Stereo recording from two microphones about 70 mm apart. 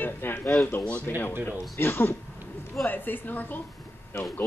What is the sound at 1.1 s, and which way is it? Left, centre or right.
A man's voice, left.